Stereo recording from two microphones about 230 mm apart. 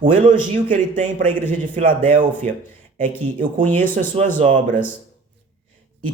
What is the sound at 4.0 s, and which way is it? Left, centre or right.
Speech, right.